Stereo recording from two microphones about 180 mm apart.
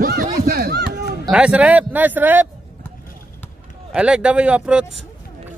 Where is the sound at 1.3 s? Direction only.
5° right (ahead or behind).